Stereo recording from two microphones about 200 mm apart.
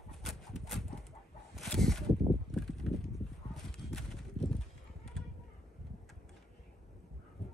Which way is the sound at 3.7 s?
5° left (ahead or behind).